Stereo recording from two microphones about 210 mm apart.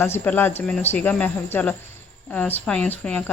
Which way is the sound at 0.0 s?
10° left (ahead or behind).